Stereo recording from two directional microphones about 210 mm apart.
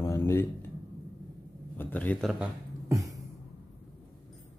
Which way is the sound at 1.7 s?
10° left (ahead or behind).